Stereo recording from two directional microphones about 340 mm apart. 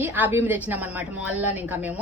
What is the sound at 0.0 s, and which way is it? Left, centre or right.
A woman's voice, centre.